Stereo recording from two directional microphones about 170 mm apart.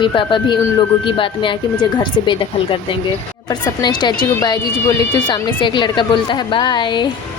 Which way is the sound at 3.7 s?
25° left (ahead or behind).